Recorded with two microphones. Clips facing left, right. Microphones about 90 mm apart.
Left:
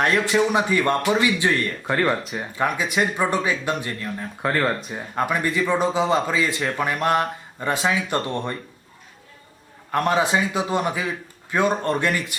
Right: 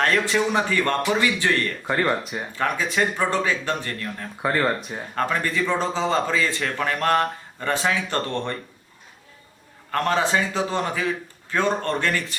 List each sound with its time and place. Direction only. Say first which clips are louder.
0.3 s a man's voice: left 2 dB; 15° left (ahead or behind)
1.9 s speech: left 1 dB; centre (ahead or behind)
2.6 s a man's voice: left 1 dB; 15° left (ahead or behind)
4.4 s speech: even; centre (ahead or behind)
5.1 s a man's voice: left 1 dB; 15° left (ahead or behind)
9.9 s a man's voice: left 1 dB; 15° left (ahead or behind)